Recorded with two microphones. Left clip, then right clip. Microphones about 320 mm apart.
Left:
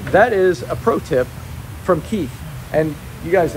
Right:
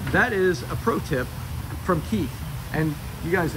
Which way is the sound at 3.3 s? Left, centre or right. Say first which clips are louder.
Left 9 dB; centre.